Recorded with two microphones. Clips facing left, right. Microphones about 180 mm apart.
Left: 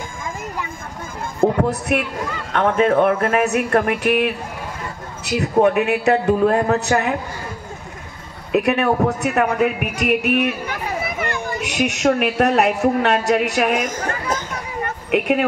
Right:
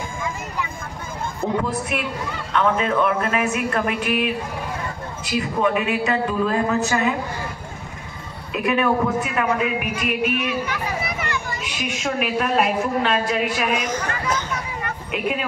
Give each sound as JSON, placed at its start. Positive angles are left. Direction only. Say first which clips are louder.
{"t": 1.4, "sound": "heart sounds", "louder": "left 6 dB", "side_deg": 60}
{"t": 2.5, "sound": "a man's voice", "louder": "left 4 dB", "side_deg": 55}
{"t": 8.5, "sound": "a man's voice", "louder": "left 3 dB", "side_deg": 65}
{"t": 15.0, "sound": "a woman's voice", "louder": "left 8 dB", "side_deg": 65}